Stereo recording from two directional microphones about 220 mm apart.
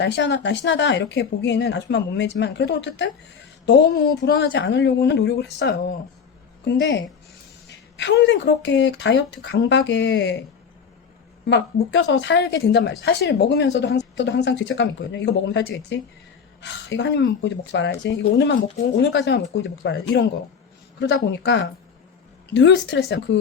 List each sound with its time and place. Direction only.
0.0 s speech: 50° left (ahead or behind)
11.9 s speech: 55° left (ahead or behind)